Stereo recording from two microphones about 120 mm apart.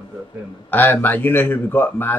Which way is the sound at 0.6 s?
15° left (ahead or behind).